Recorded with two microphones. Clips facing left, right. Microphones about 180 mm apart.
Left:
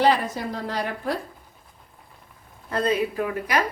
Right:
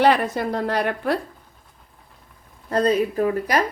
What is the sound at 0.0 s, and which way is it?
A woman's voice, 60° right (ahead or behind).